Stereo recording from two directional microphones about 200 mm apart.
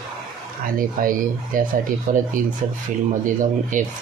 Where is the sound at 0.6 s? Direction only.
45° right (ahead or behind).